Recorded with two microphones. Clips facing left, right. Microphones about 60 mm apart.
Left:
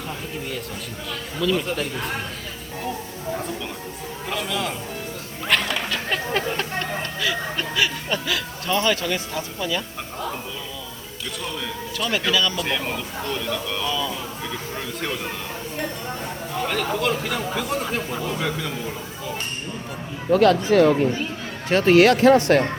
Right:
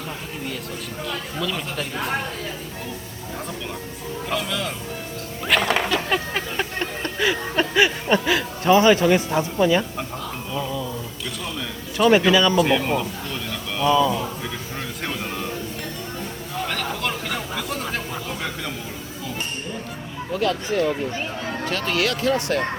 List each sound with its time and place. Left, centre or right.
1.4 s speech: centre
4.3 s speech: centre
5.5 s music: centre
5.9 s a sound: centre
7.0 s speech: right
11.9 s speech: right
12.6 s speech: centre
16.6 s speech: centre
20.3 s speech: left
21.7 s speech: left